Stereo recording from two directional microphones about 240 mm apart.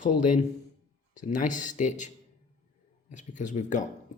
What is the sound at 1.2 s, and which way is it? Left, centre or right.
Speech, left.